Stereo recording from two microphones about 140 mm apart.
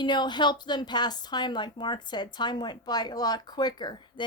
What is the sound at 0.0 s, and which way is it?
Speech, 30° left (ahead or behind).